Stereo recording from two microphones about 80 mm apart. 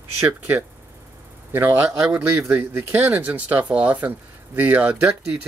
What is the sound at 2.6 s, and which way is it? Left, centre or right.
Speech, right.